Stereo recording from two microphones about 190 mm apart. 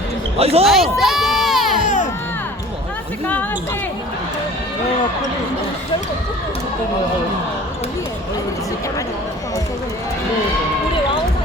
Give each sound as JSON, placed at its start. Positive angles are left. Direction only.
{"t": 0.3, "sound": "speech", "side_deg": -30}
{"t": 0.6, "sound": "crowd", "side_deg": 0}